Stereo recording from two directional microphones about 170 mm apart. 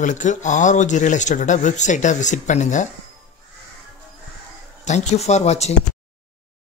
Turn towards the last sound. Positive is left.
turn(degrees=40)  # may be behind; listen again after turning